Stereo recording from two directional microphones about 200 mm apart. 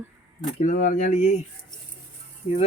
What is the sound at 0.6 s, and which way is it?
Speech, 40° left (ahead or behind).